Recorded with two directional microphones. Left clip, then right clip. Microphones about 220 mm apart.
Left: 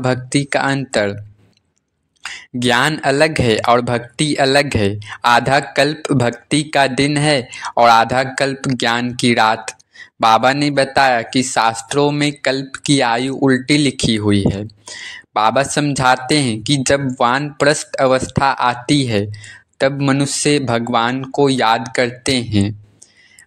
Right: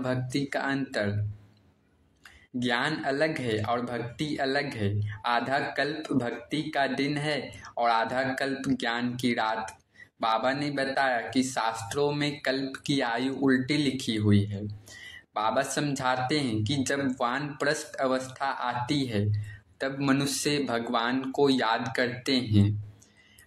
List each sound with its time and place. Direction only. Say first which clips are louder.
0.0 s speech: left 12 dB; 40° left (ahead or behind)
2.2 s speech: left 14 dB; 45° left (ahead or behind)